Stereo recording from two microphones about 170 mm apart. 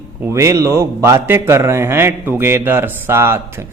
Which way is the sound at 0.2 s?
15° right (ahead or behind).